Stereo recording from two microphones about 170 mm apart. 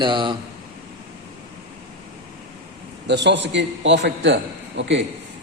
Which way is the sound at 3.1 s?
90° right.